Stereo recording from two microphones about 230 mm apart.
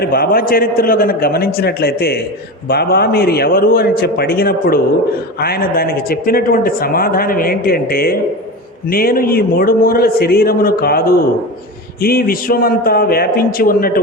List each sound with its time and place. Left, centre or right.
0.0 s a man's voice: left